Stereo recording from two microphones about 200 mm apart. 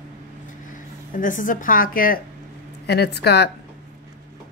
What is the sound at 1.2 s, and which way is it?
Speech, 40° left (ahead or behind).